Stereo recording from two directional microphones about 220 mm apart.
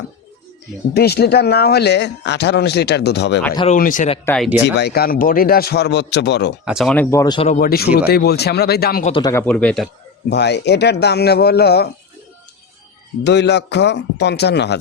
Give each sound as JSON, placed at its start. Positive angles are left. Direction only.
{"t": 0.9, "sound": "speech", "side_deg": 45}
{"t": 3.4, "sound": "speech", "side_deg": 20}
{"t": 3.7, "sound": "speech", "side_deg": 35}
{"t": 4.6, "sound": "speech", "side_deg": 50}
{"t": 6.7, "sound": "speech", "side_deg": 0}
{"t": 7.4, "sound": "speech", "side_deg": 35}
{"t": 9.0, "sound": "speech", "side_deg": 20}
{"t": 9.3, "sound": "speech", "side_deg": 5}
{"t": 10.2, "sound": "speech", "side_deg": 50}
{"t": 13.2, "sound": "speech", "side_deg": 50}